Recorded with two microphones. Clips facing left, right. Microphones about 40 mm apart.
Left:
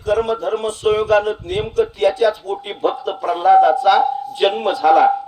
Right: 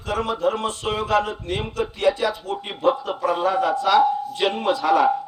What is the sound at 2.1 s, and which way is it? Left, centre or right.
Speech, centre.